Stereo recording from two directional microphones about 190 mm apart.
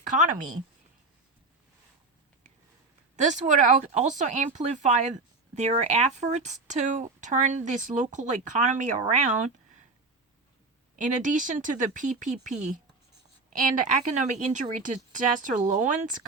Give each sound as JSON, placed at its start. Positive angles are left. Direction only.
{"t": 3.2, "sound": "speech", "side_deg": -40}
{"t": 10.9, "sound": "speech", "side_deg": -40}